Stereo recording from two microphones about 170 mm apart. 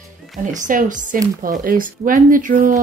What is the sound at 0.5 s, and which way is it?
A woman's voice, 50° right (ahead or behind).